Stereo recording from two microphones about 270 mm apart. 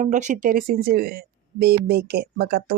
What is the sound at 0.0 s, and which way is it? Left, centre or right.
A woman's voice, right.